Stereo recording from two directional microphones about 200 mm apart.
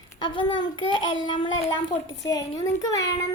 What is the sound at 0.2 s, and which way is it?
A child's voice, 25° left (ahead or behind).